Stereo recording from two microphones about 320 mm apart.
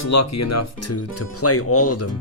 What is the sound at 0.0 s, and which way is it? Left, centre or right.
Speech, left.